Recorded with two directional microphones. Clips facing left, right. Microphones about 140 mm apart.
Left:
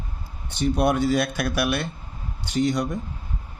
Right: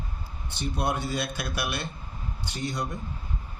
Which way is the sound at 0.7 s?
70° left (ahead or behind).